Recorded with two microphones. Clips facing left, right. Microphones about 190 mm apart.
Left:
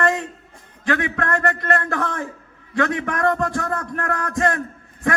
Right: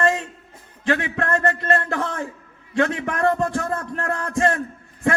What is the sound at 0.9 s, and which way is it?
A man's voice, 20° right (ahead or behind).